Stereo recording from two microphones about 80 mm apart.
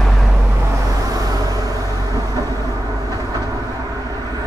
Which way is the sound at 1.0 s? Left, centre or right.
Right.